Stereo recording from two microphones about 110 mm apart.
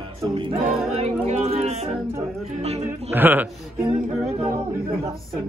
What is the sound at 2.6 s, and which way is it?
Speech, 80° right.